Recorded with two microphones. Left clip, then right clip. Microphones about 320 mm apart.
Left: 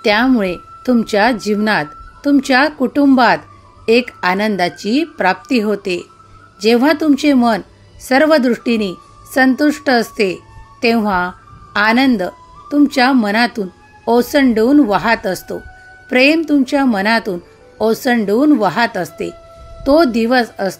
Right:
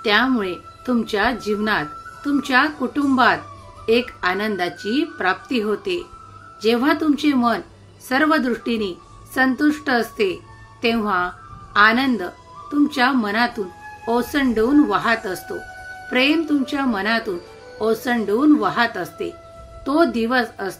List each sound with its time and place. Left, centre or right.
0.0 s a woman's voice: left